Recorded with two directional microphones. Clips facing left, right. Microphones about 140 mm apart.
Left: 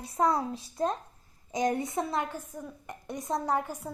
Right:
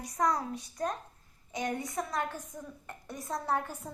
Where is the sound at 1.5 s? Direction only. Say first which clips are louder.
Left 6 dB; 40° left (ahead or behind).